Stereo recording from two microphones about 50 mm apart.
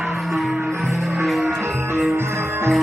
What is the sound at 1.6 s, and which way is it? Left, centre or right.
Music, right.